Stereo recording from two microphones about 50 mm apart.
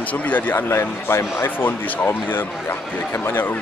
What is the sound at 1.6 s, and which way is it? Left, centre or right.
Speech, left.